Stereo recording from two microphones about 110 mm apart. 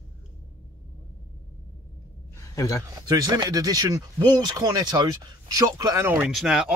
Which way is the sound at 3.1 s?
35° right (ahead or behind).